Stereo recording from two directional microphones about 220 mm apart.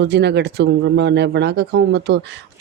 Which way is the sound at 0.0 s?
50° right (ahead or behind).